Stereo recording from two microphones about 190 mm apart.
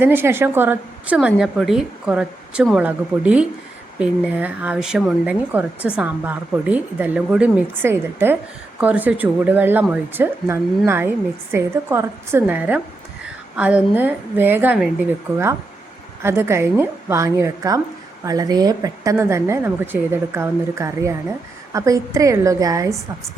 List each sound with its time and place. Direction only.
0.0 s speech: 10° right (ahead or behind)